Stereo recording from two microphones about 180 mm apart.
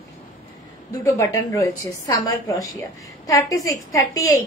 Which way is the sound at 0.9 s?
15° left (ahead or behind).